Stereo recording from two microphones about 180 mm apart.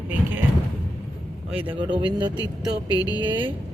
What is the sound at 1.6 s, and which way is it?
Speech, 30° right (ahead or behind).